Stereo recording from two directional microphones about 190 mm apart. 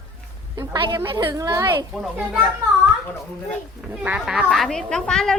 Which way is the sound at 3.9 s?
5° right (ahead or behind).